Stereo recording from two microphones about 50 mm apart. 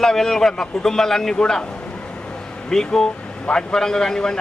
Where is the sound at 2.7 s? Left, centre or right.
Centre.